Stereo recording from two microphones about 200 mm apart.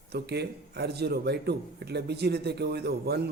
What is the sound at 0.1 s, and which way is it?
A man's voice, 55° right (ahead or behind).